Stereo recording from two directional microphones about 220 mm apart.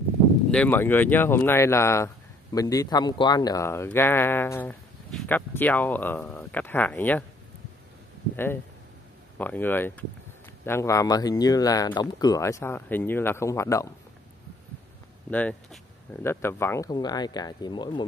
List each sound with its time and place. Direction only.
0.5 s speech: 5° left (ahead or behind)
9.4 s speech: 10° left (ahead or behind)
15.3 s speech: 5° left (ahead or behind)